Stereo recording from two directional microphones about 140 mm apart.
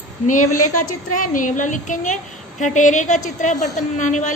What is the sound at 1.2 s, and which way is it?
A woman's voice, 70° left (ahead or behind).